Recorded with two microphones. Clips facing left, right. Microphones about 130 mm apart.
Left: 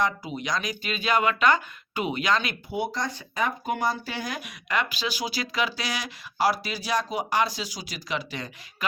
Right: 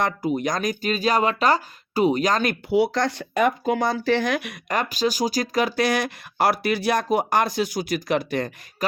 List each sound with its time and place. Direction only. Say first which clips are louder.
0.0 s speech: right 5 dB; 50° right (ahead or behind)
2.6 s speech: right 9 dB; 85° right
4.7 s speech: right 5 dB; 40° right (ahead or behind)